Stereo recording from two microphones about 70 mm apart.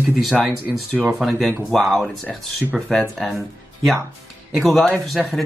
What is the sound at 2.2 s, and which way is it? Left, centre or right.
Speech, right.